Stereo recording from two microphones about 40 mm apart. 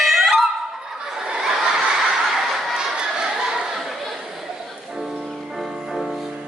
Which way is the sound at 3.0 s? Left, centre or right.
Centre.